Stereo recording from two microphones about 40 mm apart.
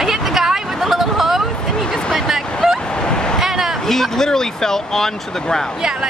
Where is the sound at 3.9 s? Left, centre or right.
Centre.